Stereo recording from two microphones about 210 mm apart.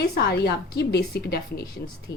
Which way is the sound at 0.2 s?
50° left (ahead or behind).